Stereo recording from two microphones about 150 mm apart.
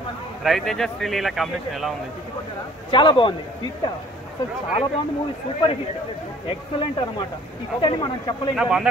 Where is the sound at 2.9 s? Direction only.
35° left (ahead or behind).